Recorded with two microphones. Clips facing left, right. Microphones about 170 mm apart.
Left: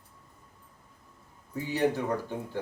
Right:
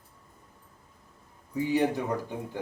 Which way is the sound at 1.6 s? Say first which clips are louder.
Right 5 dB; 15° right (ahead or behind).